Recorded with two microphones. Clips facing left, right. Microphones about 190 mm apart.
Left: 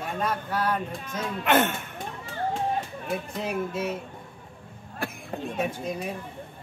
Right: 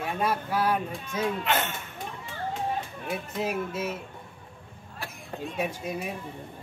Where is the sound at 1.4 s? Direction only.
55° left (ahead or behind).